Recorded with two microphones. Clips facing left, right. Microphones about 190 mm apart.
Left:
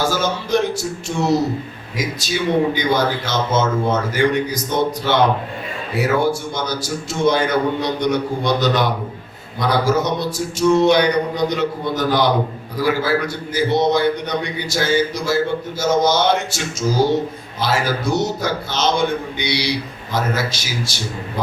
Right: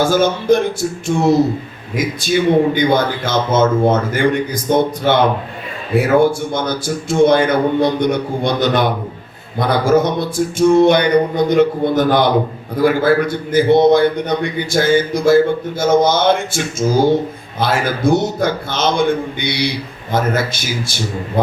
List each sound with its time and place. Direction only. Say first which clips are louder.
0.0 s a man's voice: right 6 dB; 55° right (ahead or behind)